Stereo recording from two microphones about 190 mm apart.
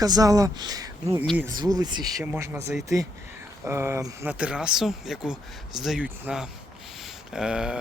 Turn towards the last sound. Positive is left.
turn(degrees=-5)  # may be behind; listen again after turning